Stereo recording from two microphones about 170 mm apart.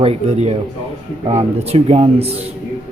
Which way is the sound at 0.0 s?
35° right (ahead or behind).